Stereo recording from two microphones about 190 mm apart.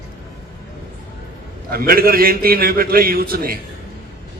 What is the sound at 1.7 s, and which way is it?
A man's voice, 50° right (ahead or behind).